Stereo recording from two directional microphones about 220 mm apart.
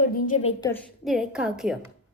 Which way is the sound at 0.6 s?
10° left (ahead or behind).